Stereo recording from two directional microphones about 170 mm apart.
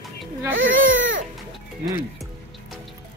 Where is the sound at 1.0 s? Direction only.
90° right.